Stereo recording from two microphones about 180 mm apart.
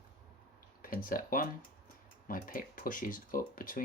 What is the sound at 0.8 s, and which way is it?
Speech, 50° left (ahead or behind).